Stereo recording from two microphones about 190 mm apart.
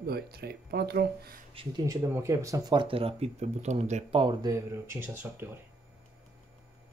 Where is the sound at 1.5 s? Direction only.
20° right (ahead or behind).